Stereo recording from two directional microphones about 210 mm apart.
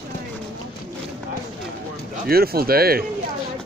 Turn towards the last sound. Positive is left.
turn(degrees=-45)  # may be behind; listen again after turning